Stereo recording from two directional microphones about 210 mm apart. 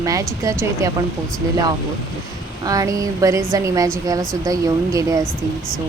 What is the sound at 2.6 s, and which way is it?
Speech, 15° right (ahead or behind).